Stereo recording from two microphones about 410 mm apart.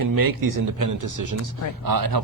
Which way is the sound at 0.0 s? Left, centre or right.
Right.